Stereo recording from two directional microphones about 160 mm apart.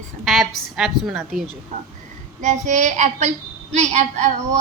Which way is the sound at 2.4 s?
50° right (ahead or behind).